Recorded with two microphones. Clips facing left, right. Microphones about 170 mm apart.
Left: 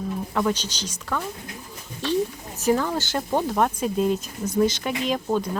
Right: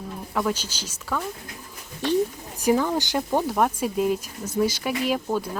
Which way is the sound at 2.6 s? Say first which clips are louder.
Right 1 dB; 15° right (ahead or behind).